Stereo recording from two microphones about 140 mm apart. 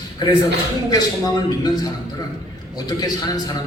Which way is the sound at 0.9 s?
30° left (ahead or behind).